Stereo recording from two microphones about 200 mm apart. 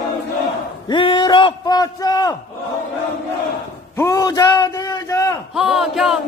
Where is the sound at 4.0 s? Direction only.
15° left (ahead or behind).